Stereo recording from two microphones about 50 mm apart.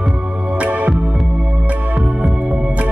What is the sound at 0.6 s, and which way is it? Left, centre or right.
Music, right.